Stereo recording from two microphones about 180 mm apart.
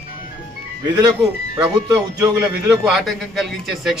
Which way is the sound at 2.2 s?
15° right (ahead or behind).